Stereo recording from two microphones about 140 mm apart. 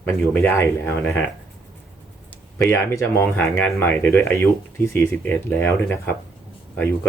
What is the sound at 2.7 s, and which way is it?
Speech, 20° left (ahead or behind).